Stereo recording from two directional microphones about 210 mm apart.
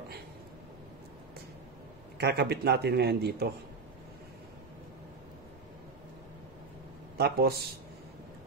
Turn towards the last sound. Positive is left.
turn(degrees=-45)  # may be behind; listen again after turning